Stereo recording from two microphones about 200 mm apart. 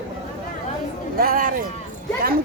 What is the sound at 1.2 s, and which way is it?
Speech, 45° right (ahead or behind).